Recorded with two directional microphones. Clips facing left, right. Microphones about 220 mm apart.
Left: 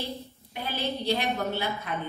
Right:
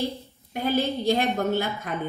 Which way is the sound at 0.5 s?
45° right (ahead or behind).